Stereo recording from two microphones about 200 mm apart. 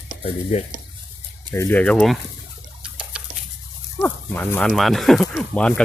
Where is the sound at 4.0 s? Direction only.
10° left (ahead or behind).